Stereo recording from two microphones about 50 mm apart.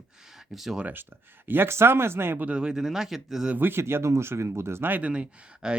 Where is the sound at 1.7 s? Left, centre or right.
Right.